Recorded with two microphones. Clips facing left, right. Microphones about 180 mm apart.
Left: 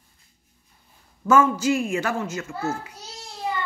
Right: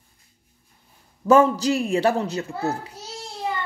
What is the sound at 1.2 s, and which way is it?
Speech, 35° right (ahead or behind).